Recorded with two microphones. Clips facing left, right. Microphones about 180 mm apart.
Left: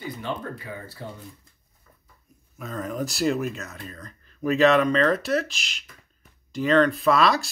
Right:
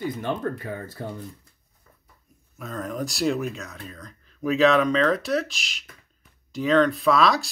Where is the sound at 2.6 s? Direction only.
Centre (ahead or behind).